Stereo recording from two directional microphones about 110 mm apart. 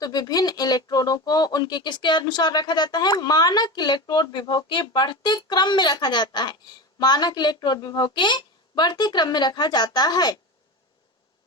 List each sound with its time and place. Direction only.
0.0 s speech: 40° left (ahead or behind)